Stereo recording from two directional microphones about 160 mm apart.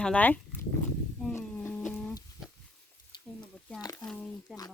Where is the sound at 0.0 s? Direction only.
10° left (ahead or behind).